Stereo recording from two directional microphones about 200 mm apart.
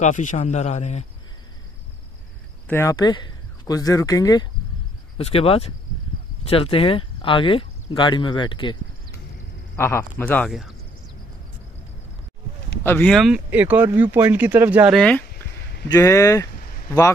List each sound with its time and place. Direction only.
0.0 s a man's voice: 40° left (ahead or behind)
2.7 s speech: 15° left (ahead or behind)
5.1 s speech: 30° left (ahead or behind)
9.8 s speech: 10° left (ahead or behind)
12.8 s speech: 10° left (ahead or behind); by 15.0 s 10° right (ahead or behind)
15.0 s speech: 5° left (ahead or behind)